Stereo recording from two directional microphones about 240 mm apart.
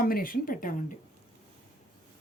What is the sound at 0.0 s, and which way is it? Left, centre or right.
Speech, left.